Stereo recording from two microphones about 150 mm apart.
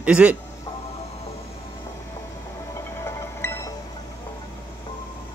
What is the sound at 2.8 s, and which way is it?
Music, 20° left (ahead or behind).